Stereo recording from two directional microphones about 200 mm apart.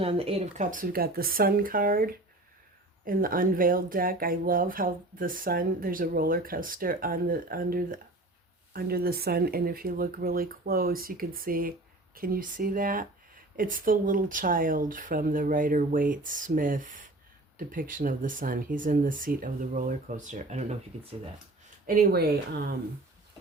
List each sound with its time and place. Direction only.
0.0 s speech: 30° right (ahead or behind)
21.8 s speech: 50° right (ahead or behind)